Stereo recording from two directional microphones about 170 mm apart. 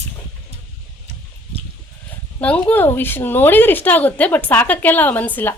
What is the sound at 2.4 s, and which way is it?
A woman's voice, 10° left (ahead or behind).